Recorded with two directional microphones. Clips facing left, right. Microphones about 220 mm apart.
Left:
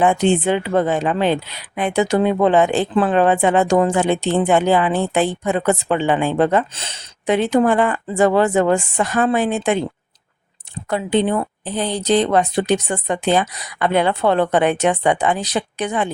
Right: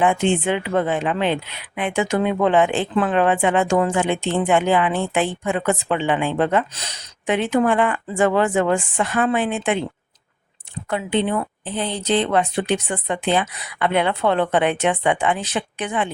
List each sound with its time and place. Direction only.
0.0 s speech: 35° left (ahead or behind)
10.8 s speech: 40° left (ahead or behind)